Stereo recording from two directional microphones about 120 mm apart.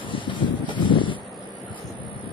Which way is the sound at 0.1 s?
45° left (ahead or behind).